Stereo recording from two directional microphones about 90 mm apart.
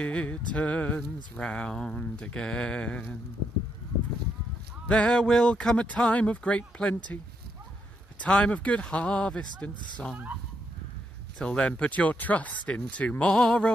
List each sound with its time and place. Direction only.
0.0 s speech: 15° left (ahead or behind)
4.8 s speech: 10° left (ahead or behind)
8.2 s speech: 10° left (ahead or behind)
11.3 s speech: 10° left (ahead or behind)